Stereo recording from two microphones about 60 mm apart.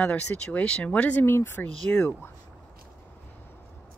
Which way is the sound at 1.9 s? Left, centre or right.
Left.